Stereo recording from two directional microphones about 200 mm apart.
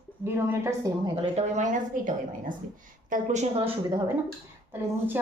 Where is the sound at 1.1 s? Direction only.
35° right (ahead or behind).